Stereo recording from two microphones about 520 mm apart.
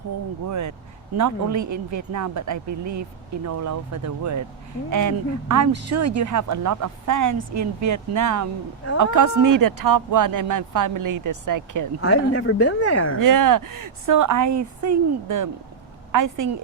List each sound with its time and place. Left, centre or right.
1.1 s speech: right
11.9 s speech: left
13.1 s speech: right